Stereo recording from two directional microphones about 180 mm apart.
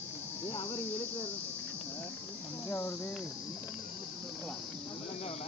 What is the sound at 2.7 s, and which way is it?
Speech, 15° left (ahead or behind).